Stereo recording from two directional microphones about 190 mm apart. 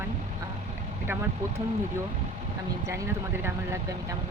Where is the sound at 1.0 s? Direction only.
10° right (ahead or behind).